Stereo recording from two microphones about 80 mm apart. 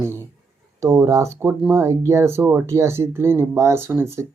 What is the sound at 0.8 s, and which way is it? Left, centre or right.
Speech, right.